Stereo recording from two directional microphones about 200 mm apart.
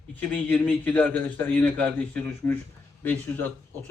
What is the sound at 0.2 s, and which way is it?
A man's voice, 5° left (ahead or behind).